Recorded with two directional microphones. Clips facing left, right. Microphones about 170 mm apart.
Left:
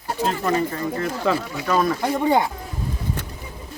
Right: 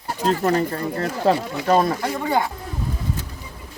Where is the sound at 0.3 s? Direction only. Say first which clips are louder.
Right 4 dB; 40° right (ahead or behind).